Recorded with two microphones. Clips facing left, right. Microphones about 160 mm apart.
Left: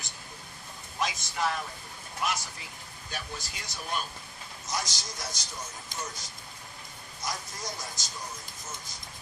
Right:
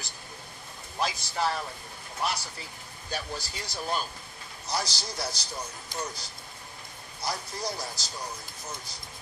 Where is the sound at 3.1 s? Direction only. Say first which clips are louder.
Right 5 dB; 35° right (ahead or behind).